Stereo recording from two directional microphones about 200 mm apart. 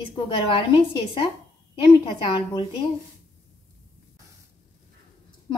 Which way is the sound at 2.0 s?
25° left (ahead or behind).